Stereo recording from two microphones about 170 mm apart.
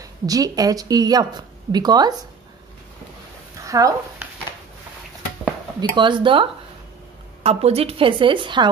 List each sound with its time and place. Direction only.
0.0 s speech: 20° right (ahead or behind)
3.6 s speech: 20° right (ahead or behind)
5.8 s a woman's voice: 25° right (ahead or behind)